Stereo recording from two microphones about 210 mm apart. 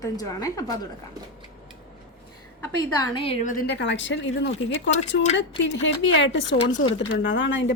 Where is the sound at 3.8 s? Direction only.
60° left (ahead or behind).